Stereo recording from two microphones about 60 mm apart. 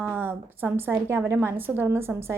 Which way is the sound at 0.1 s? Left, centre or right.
Right.